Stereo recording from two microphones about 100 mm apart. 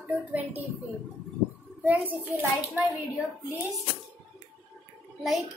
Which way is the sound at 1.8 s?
15° right (ahead or behind).